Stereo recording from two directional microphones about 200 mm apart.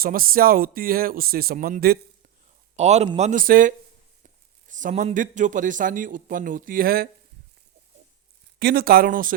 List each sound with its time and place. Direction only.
0.0 s speech: 45° right (ahead or behind)
2.7 s a man's voice: 35° right (ahead or behind)
8.5 s speech: 50° right (ahead or behind)